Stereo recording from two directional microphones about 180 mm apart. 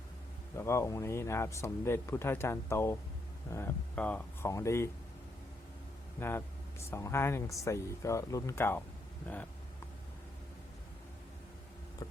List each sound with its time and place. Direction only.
0.5 s speech: 15° left (ahead or behind)
6.1 s speech: 10° left (ahead or behind)